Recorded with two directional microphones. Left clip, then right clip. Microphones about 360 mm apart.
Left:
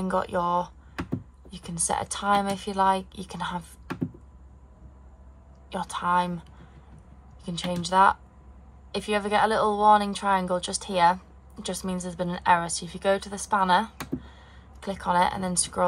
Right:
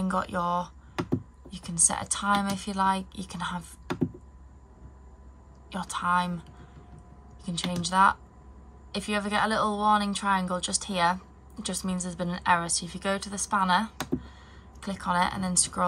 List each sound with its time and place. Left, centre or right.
0.0 s a woman's voice: centre
3.8 s typing: right
5.7 s a woman's voice: centre
7.8 s a woman's voice: centre